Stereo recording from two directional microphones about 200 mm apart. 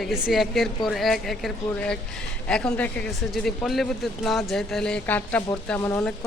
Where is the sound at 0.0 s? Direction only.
Centre (ahead or behind).